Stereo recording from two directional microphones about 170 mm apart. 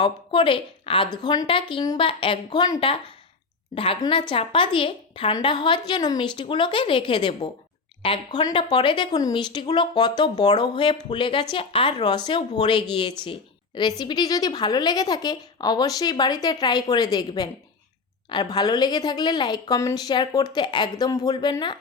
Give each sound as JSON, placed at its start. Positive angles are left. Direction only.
{"t": 0.0, "sound": "a woman's voice", "side_deg": 30}